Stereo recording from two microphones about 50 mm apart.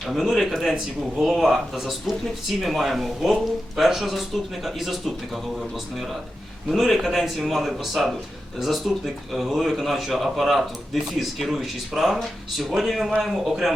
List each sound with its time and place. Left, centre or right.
0.0 s speech: centre